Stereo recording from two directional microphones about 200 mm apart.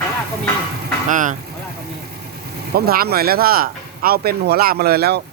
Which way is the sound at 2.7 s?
50° right (ahead or behind).